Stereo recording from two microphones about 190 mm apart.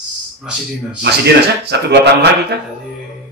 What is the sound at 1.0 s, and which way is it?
Speech, 60° right (ahead or behind).